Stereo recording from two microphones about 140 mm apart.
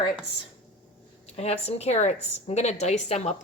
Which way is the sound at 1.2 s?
45° left (ahead or behind).